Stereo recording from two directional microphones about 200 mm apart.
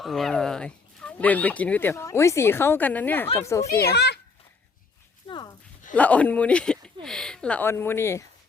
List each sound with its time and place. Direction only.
0.0 s speech: centre (ahead or behind)
3.9 s a child's voice: 55° left (ahead or behind)
5.3 s a sound: 20° left (ahead or behind)
5.9 s speech: 5° left (ahead or behind)